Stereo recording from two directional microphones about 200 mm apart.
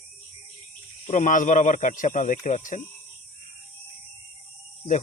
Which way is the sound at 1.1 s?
40° left (ahead or behind).